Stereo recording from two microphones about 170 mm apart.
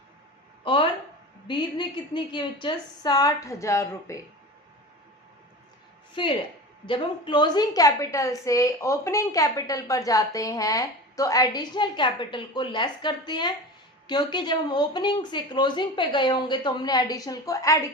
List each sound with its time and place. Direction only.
0.6 s a sound: 30° left (ahead or behind)
1.5 s a woman's voice: 25° left (ahead or behind)
6.2 s a woman's voice: 30° left (ahead or behind)